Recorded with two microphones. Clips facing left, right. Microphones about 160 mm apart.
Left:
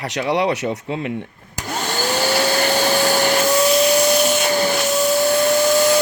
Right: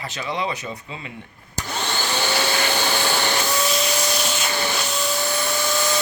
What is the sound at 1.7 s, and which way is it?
Vacuum cleaner, 40° left (ahead or behind).